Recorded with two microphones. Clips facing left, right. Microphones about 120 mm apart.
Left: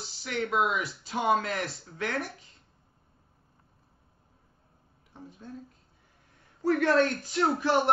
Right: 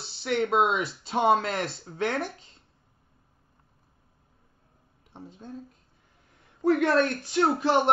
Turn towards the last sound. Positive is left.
turn(degrees=-25)  # may be behind; listen again after turning